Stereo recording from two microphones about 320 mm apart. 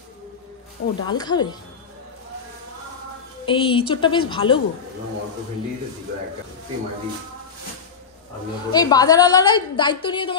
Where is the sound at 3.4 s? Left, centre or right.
Centre.